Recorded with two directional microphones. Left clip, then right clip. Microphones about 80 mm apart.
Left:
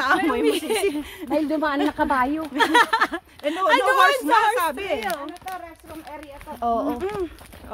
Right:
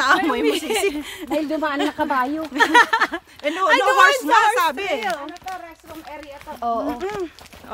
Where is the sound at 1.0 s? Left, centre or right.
Right.